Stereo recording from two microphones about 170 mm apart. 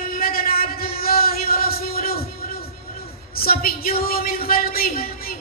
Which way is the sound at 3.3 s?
60° left (ahead or behind).